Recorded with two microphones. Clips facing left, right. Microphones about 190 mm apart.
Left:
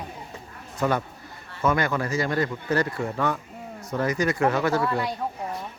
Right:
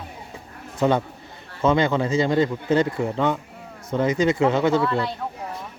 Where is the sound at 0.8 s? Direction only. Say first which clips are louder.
Right 4 dB; 25° right (ahead or behind).